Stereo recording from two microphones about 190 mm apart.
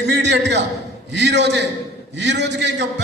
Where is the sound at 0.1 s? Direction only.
65° right (ahead or behind).